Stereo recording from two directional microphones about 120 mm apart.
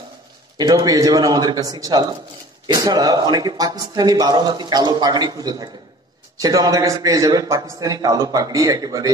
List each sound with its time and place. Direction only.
0.6 s a man's voice: 30° right (ahead or behind)